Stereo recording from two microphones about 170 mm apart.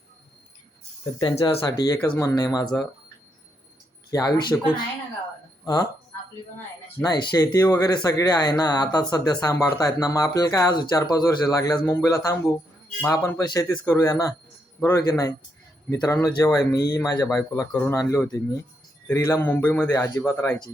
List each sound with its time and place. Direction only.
1.2 s speech: 30° left (ahead or behind)
1.6 s speech: 20° left (ahead or behind)
4.1 s speech: 25° left (ahead or behind)
7.0 s a man's voice: 25° left (ahead or behind)